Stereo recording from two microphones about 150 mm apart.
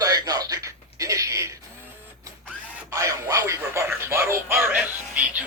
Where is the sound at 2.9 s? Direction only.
20° right (ahead or behind).